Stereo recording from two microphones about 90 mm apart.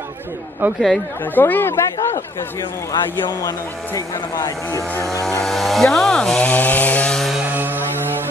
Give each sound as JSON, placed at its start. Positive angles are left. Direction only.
{"t": 1.3, "sound": "speech", "side_deg": 20}
{"t": 2.9, "sound": "speech", "side_deg": 40}
{"t": 5.2, "sound": "speech", "side_deg": 5}
{"t": 7.5, "sound": "a sound", "side_deg": -20}